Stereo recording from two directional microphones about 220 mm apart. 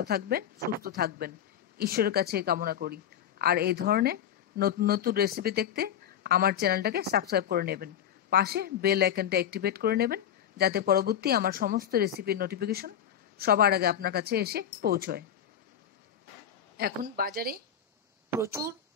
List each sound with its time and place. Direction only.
0.0 s speech: 45° right (ahead or behind)
16.7 s speech: 40° right (ahead or behind)
18.3 s speech: 10° right (ahead or behind)